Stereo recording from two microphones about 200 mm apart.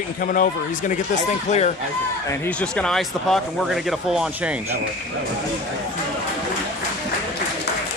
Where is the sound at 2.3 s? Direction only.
5° left (ahead or behind).